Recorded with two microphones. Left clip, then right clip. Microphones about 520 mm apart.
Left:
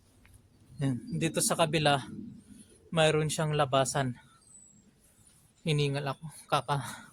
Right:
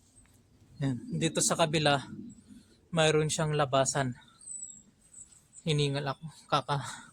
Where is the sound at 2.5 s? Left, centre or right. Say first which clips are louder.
Even; left.